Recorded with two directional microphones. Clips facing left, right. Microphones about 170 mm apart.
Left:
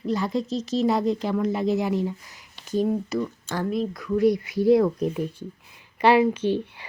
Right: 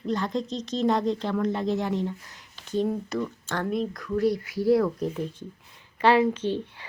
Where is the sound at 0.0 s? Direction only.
5° left (ahead or behind).